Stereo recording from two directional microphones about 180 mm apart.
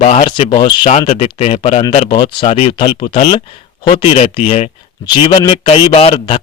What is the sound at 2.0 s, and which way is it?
Speech, 25° left (ahead or behind).